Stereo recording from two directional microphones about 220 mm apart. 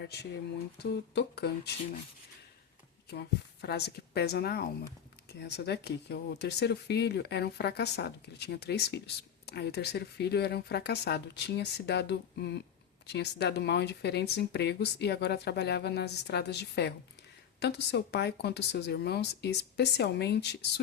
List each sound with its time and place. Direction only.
0.0 s speech: 50° left (ahead or behind)
3.1 s speech: 50° left (ahead or behind)